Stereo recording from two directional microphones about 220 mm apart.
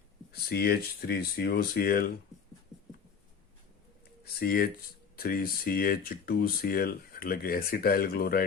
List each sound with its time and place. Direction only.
0.3 s speech: 45° left (ahead or behind)
4.2 s a sound: 45° left (ahead or behind)
5.1 s speech: 40° left (ahead or behind)